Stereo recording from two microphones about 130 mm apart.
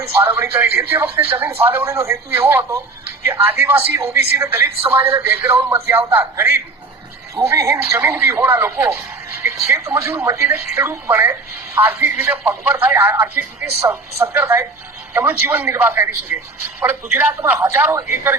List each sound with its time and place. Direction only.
0.0 s speech: 15° right (ahead or behind)